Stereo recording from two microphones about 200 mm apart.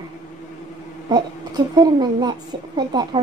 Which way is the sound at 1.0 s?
20° right (ahead or behind).